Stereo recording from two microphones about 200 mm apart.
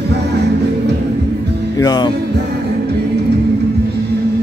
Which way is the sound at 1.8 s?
20° left (ahead or behind).